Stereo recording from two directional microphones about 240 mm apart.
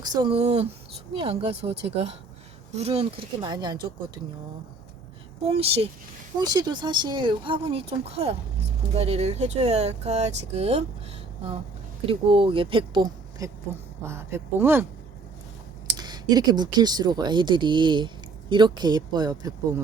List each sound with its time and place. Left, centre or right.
0.0 s speech: centre
5.5 s speech: right
12.0 s speech: right
16.0 s speech: centre